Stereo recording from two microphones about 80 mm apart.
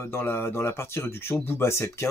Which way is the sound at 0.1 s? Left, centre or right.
Left.